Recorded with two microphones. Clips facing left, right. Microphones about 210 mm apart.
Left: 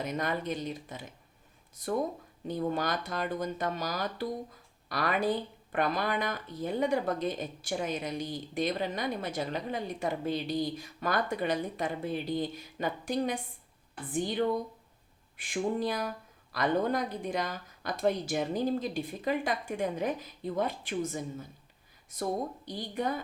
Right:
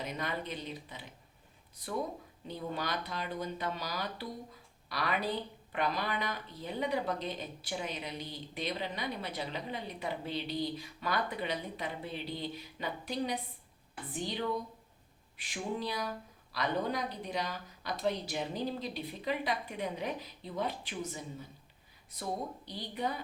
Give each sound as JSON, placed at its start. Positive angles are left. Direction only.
{"t": 0.0, "sound": "speech", "side_deg": 45}
{"t": 2.5, "sound": "speech", "side_deg": 45}